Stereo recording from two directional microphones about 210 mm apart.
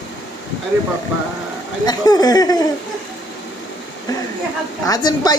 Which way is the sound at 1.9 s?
20° left (ahead or behind).